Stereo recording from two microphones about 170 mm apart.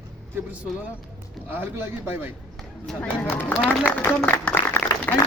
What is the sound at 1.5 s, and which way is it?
Speech, 15° right (ahead or behind).